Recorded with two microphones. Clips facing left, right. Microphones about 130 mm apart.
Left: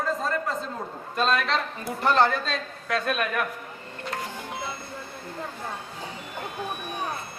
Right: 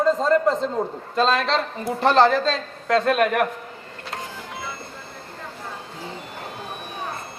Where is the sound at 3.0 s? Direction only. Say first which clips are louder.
Right 7 dB; 75° right (ahead or behind).